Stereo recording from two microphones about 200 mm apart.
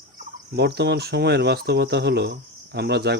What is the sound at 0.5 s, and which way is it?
Speech, 55° right (ahead or behind).